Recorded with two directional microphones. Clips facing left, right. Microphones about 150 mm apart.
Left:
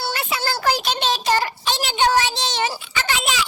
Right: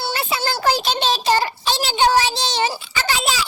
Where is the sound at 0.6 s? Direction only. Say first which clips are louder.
Right 2 dB; 30° right (ahead or behind).